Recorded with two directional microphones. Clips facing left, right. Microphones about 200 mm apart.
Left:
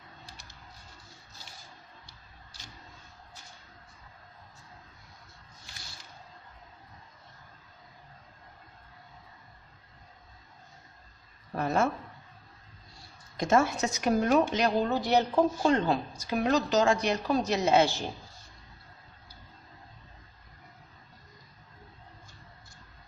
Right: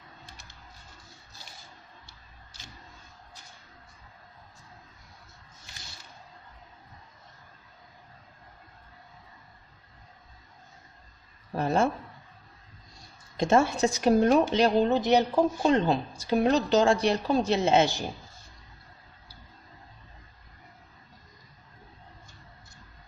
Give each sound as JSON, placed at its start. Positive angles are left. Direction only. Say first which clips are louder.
{"t": 11.5, "sound": "a woman's voice", "louder": "right 2 dB", "side_deg": -30}
{"t": 13.3, "sound": "a woman's voice", "louder": "right 2 dB", "side_deg": -25}